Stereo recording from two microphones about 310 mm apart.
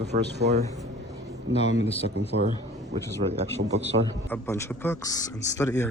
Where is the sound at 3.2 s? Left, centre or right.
Right.